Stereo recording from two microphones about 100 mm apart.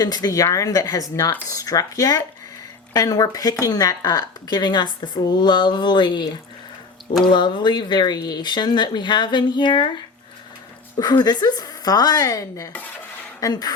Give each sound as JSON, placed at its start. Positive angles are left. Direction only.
{"t": 0.0, "sound": "a woman's voice", "side_deg": 40}
{"t": 7.3, "sound": "speech", "side_deg": 50}
{"t": 10.9, "sound": "a woman's voice", "side_deg": 45}